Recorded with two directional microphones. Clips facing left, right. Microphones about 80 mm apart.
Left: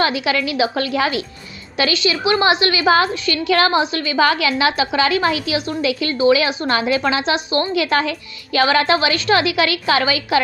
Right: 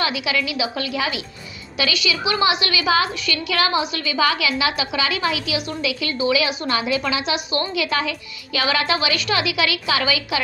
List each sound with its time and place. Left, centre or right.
0.0 s a woman's voice: left